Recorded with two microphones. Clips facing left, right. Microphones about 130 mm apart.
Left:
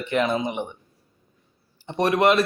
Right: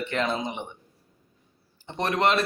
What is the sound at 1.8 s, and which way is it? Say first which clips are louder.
Speech: left 5 dB; 15° left (ahead or behind).